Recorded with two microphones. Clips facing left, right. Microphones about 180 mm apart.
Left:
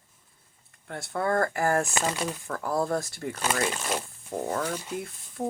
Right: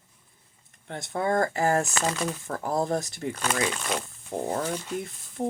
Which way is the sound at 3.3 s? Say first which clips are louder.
Left 1 dB; 5° left (ahead or behind).